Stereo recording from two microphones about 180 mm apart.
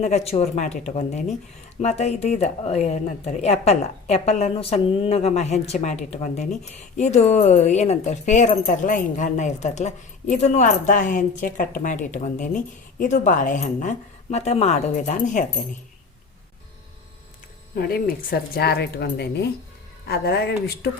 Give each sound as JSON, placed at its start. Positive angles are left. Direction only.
{"t": 0.0, "sound": "a woman's voice", "side_deg": 35}
{"t": 17.7, "sound": "speech", "side_deg": 55}